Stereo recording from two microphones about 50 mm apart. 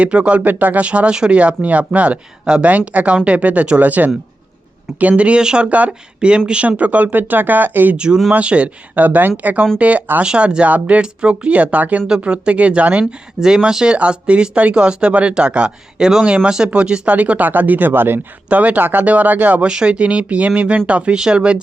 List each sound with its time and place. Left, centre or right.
0.0 s speech: right
0.4 s speech: right
0.9 s speech: right
2.4 s speech: centre
2.6 s speech: right
7.9 s speech: centre
10.2 s speech: centre
11.0 s speech: centre
12.0 s speech: centre
13.1 s speech: centre
17.2 s speech: right
18.4 s speech: right
19.6 s speech: centre